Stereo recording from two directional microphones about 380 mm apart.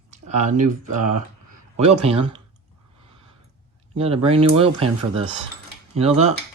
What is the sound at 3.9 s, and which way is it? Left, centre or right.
Speech, centre.